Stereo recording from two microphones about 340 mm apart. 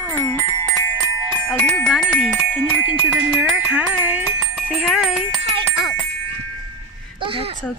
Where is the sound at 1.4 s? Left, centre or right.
Centre.